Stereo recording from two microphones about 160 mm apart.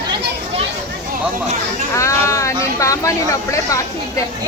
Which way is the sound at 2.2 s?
20° left (ahead or behind).